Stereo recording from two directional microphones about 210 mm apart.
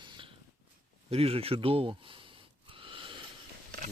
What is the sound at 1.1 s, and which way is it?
Speech, 30° right (ahead or behind).